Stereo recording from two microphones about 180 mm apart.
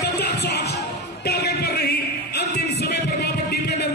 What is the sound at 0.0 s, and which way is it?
Music, 65° left (ahead or behind).